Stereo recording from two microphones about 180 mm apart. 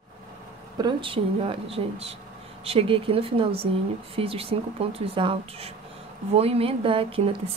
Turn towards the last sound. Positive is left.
turn(degrees=-30)  # may be behind; listen again after turning